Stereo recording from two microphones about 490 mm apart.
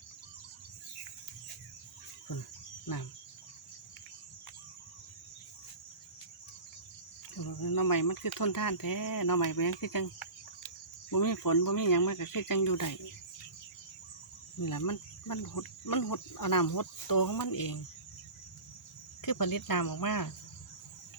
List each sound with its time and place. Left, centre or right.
2.8 s speech: left
7.3 s speech: left
14.6 s speech: left
19.2 s speech: left